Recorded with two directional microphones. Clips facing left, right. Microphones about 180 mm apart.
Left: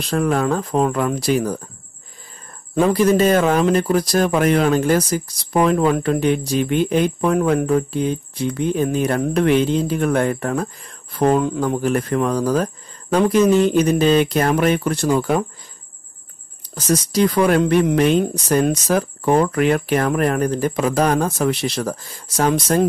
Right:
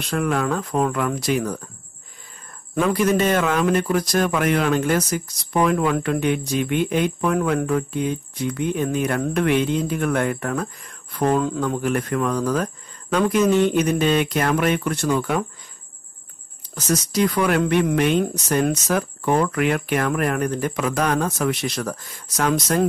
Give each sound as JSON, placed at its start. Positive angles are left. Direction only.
{"t": 0.1, "sound": "speech", "side_deg": 35}
{"t": 2.7, "sound": "speech", "side_deg": 30}
{"t": 11.6, "sound": "speech", "side_deg": 30}
{"t": 16.7, "sound": "speech", "side_deg": 35}